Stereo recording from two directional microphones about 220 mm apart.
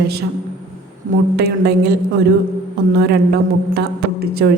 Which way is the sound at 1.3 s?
50° right (ahead or behind).